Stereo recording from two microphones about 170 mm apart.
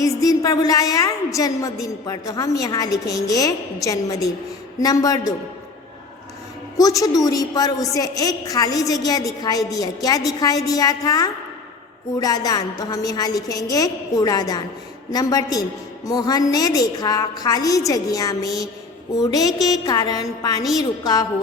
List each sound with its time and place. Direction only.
0.0 s a woman's voice: 20° left (ahead or behind)
6.7 s a woman's voice: 20° left (ahead or behind)